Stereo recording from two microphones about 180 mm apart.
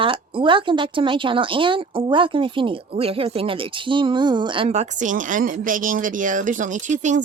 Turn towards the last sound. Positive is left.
turn(degrees=-40)  # may be behind; listen again after turning